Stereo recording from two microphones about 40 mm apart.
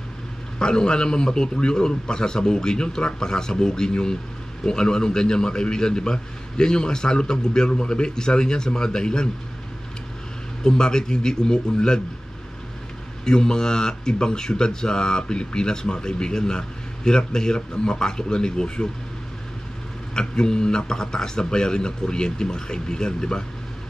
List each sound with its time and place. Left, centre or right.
0.6 s speech: left
10.6 s speech: centre
13.2 s speech: centre
20.2 s speech: centre